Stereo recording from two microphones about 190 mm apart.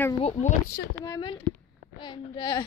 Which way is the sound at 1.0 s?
20° left (ahead or behind).